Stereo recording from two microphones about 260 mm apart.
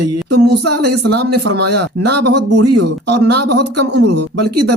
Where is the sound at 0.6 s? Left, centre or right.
Right.